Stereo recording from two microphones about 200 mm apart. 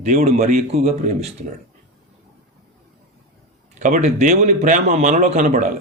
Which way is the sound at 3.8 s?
40° right (ahead or behind).